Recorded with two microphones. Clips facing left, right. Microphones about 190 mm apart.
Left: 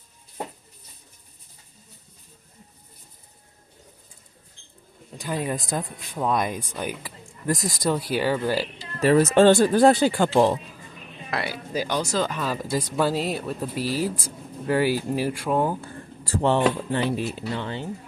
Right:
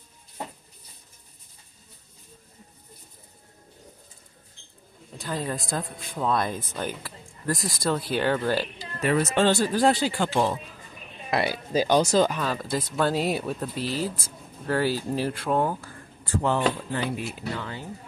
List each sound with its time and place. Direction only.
5.1 s speech: 15° left (ahead or behind)
9.0 s speech: 40° left (ahead or behind)
11.2 s speech: 20° right (ahead or behind)
12.3 s speech: centre (ahead or behind)
12.5 s speech: 15° left (ahead or behind)
13.1 s speech: centre (ahead or behind)
15.8 s speech: 30° left (ahead or behind)